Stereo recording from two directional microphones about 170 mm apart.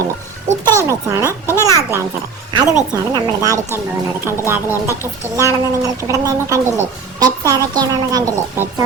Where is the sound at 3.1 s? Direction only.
20° right (ahead or behind).